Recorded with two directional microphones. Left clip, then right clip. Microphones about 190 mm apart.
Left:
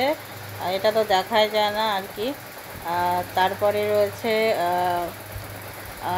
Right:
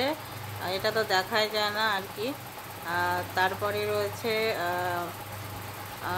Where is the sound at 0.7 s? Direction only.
15° left (ahead or behind).